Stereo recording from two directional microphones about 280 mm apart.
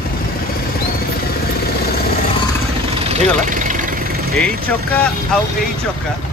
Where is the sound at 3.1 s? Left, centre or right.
Right.